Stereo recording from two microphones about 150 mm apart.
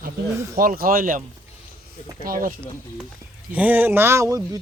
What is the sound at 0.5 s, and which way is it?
Speech, 75° right (ahead or behind).